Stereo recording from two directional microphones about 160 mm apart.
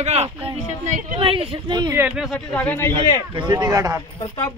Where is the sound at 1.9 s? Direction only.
10° right (ahead or behind).